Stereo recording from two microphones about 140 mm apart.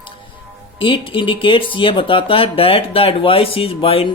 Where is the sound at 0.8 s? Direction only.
40° left (ahead or behind).